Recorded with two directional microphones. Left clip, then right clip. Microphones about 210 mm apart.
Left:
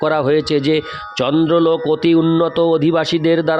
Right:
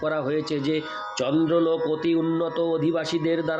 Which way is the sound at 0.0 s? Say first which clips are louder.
Left 10 dB; 55° left (ahead or behind).